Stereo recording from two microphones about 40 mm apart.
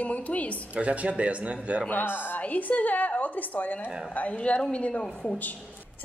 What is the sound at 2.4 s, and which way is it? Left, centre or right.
A woman's voice, left.